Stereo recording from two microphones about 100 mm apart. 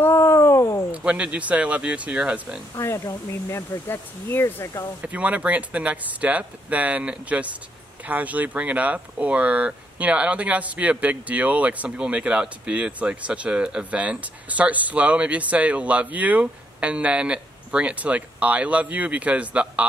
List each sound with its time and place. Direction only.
0.0 s a sound: 25° left (ahead or behind)
0.9 s speech: 10° right (ahead or behind)
2.7 s speech: 30° left (ahead or behind)
5.0 s speech: 15° right (ahead or behind)